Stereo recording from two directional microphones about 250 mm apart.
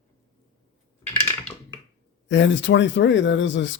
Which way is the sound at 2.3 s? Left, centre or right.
Left.